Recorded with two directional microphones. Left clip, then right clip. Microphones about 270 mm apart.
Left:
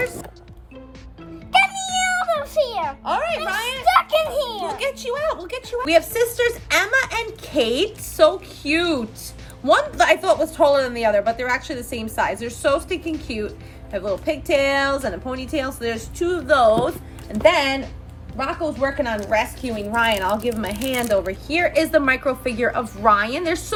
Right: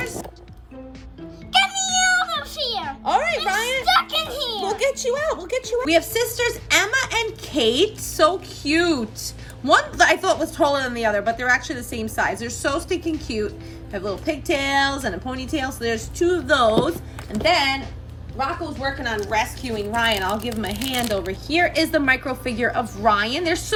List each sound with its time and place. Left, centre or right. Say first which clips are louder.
1.5 s music: left 1 dB; centre
3.0 s music: right 5 dB; right
3.8 s music: left 5 dB; centre
4.8 s speech: right 3 dB; right
5.8 s a woman's voice: left 4 dB; centre
17.3 s a woman's voice: left 2 dB; centre
19.3 s a woman's voice: left 2 dB; centre